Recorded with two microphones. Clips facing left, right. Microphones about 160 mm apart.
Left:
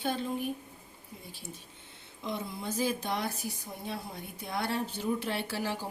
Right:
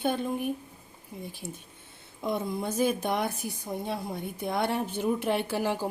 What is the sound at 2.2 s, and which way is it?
A woman's voice, 55° right (ahead or behind).